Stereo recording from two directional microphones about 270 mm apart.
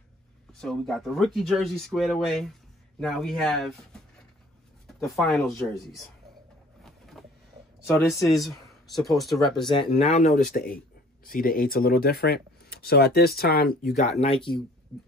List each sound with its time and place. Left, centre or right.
0.5 s speech: centre
4.8 s speech: centre
6.8 s a sound: centre
7.8 s speech: centre
9.7 s speech: centre
14.2 s speech: centre